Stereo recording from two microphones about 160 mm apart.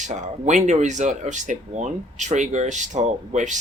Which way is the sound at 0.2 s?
50° right (ahead or behind).